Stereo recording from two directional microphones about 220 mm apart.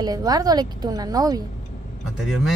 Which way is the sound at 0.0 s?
15° right (ahead or behind).